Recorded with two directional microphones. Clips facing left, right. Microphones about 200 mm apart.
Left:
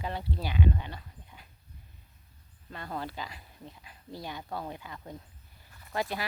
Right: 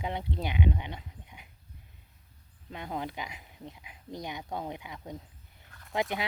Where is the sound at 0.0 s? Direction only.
20° right (ahead or behind).